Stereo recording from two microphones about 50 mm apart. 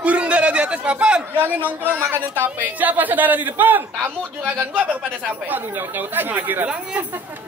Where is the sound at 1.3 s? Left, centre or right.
Right.